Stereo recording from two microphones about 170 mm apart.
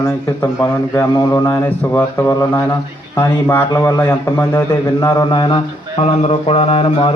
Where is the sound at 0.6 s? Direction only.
15° left (ahead or behind); by 7.1 s 35° left (ahead or behind).